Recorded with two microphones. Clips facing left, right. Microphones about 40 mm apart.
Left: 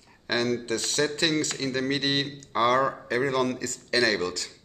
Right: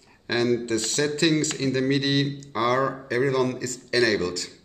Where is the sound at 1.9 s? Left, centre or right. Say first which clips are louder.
Right 4 dB; centre.